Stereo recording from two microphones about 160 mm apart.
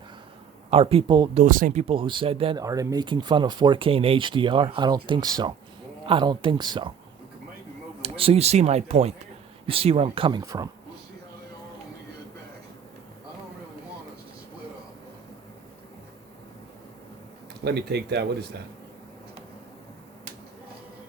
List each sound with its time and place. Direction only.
0.7 s speech: 35° right (ahead or behind)
1.5 s speech: 60° right (ahead or behind)
1.9 s speech: 30° right (ahead or behind)
2.6 s speech: 20° right (ahead or behind)
8.0 s speech: 40° right (ahead or behind); by 10.7 s 20° right (ahead or behind)
17.6 s speech: 90° right